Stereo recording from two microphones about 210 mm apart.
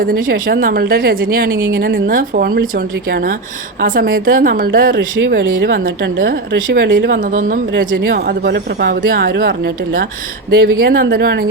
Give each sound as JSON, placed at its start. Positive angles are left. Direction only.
{"t": 0.0, "sound": "speech", "side_deg": -45}